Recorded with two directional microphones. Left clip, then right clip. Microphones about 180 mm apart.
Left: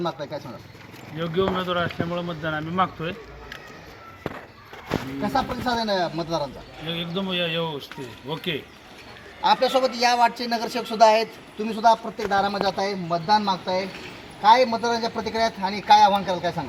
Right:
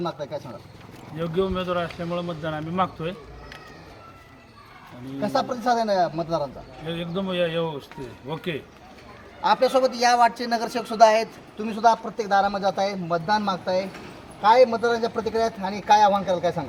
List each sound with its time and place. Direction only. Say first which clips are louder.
0.0 s speech: left 1 dB; 15° right (ahead or behind)
5.2 s speech: right 3 dB; 10° right (ahead or behind)
9.4 s a man's voice: even; centre (ahead or behind)